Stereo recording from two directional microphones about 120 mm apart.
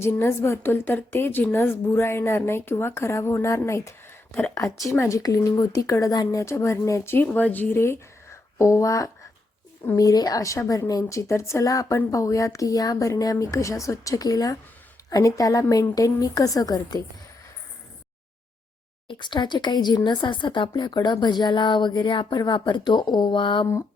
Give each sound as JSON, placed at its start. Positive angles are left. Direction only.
{"t": 0.0, "sound": "a woman's voice", "side_deg": 20}
{"t": 19.0, "sound": "speech", "side_deg": 40}